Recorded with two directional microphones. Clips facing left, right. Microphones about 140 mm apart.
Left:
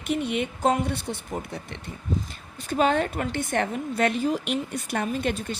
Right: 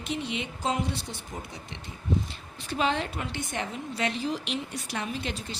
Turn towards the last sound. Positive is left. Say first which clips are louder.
# left 7 dB
turn(degrees=50)  # may be behind; listen again after turning